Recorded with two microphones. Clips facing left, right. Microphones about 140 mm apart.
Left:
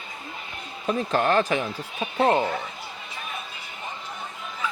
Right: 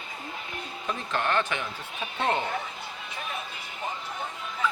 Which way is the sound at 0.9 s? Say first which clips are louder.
Left 7 dB; 35° left (ahead or behind).